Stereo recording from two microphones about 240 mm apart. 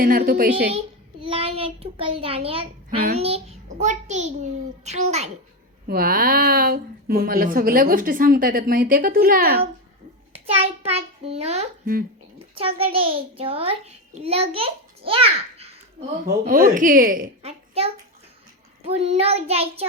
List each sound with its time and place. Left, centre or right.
0.0 s a woman's voice: right
1.2 s a child's voice: right
10.3 s a child's voice: right
16.2 s a woman's voice: right